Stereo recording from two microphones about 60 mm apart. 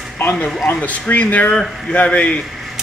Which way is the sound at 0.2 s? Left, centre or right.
Left.